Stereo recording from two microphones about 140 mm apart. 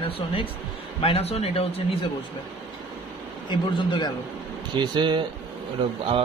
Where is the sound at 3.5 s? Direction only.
35° left (ahead or behind).